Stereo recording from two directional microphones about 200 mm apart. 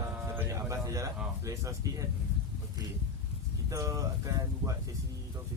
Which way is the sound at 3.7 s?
15° right (ahead or behind).